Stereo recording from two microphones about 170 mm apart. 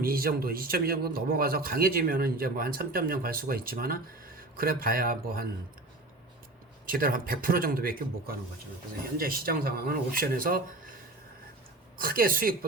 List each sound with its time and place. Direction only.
0.0 s speech: 60° right (ahead or behind)
6.8 s speech: 55° right (ahead or behind)
11.9 s speech: 55° right (ahead or behind)